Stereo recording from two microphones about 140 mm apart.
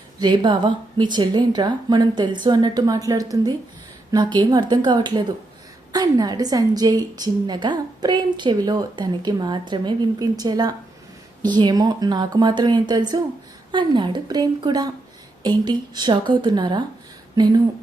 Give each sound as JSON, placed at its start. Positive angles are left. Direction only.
{"t": 0.2, "sound": "a woman's voice", "side_deg": -30}